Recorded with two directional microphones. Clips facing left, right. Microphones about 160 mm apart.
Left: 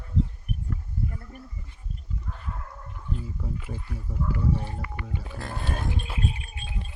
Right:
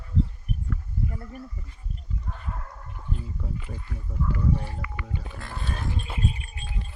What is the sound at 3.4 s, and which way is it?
Speech, 5° left (ahead or behind).